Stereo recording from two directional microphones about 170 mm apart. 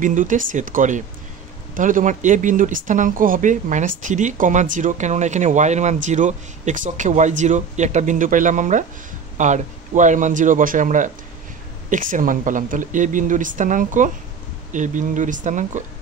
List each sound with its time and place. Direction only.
0.0 s speech: 50° right (ahead or behind)